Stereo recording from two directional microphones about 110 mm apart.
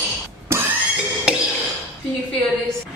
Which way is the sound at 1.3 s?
10° right (ahead or behind).